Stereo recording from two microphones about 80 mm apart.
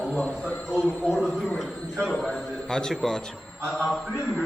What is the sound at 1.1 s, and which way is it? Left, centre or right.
A man's voice, centre.